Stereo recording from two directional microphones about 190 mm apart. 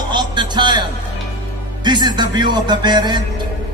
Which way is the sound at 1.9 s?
25° right (ahead or behind).